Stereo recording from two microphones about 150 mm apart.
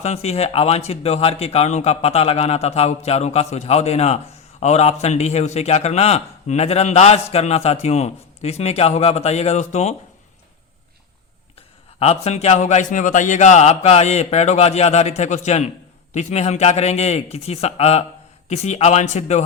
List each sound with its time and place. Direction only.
0.0 s speech: 45° left (ahead or behind)
11.9 s speech: 45° left (ahead or behind)